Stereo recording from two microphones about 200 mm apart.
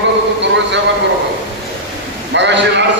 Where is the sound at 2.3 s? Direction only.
60° right (ahead or behind).